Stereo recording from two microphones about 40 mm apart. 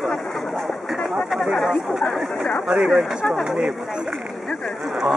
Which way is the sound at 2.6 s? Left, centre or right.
Right.